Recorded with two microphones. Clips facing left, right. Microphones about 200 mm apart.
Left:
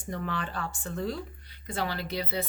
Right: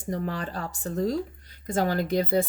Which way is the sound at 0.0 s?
35° right (ahead or behind).